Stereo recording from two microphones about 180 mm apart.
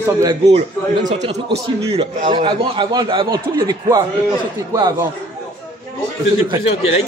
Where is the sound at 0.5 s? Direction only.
35° right (ahead or behind); by 4.0 s 20° right (ahead or behind).